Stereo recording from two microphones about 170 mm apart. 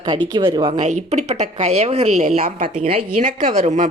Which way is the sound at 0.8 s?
45° right (ahead or behind).